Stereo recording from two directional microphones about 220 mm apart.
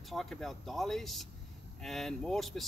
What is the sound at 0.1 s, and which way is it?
Speech, centre (ahead or behind).